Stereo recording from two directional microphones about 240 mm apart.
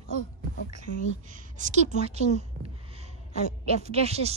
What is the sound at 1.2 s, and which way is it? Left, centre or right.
Speech, right.